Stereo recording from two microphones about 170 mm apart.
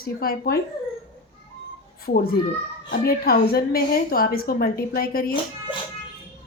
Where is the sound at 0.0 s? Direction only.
60° left (ahead or behind).